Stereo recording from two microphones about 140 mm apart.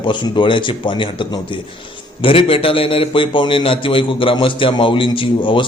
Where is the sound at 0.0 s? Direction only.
35° left (ahead or behind).